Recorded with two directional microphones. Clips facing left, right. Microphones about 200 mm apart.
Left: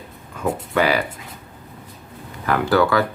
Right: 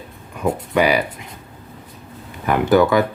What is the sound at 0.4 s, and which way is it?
Music, 15° right (ahead or behind).